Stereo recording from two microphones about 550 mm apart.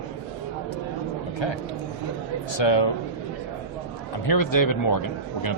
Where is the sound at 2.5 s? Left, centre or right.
Left.